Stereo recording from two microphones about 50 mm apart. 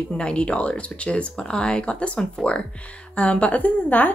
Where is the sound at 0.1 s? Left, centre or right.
Left.